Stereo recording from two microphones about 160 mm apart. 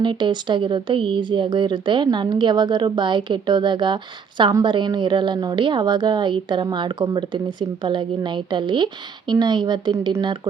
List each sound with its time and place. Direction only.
0.0 s speech: 30° right (ahead or behind)